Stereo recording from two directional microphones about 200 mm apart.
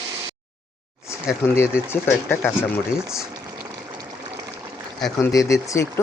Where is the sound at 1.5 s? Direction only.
15° left (ahead or behind).